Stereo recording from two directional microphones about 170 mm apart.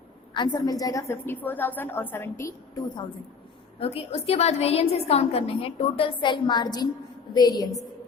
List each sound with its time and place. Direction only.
0.3 s a woman's voice: 25° left (ahead or behind)
3.8 s a woman's voice: 35° left (ahead or behind)